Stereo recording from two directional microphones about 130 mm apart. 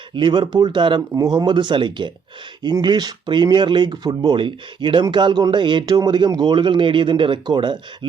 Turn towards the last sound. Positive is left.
turn(degrees=-35)  # may be behind; listen again after turning